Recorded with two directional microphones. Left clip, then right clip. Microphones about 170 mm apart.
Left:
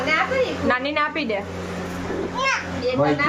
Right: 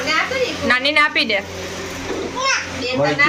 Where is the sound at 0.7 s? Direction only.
10° left (ahead or behind).